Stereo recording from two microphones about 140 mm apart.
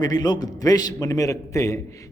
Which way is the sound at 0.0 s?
30° left (ahead or behind).